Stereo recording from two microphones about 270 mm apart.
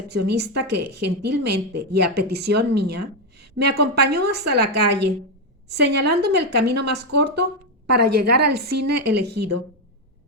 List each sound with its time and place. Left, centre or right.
0.1 s a woman's voice: right
8.3 s a woman's voice: right
8.9 s a woman's voice: right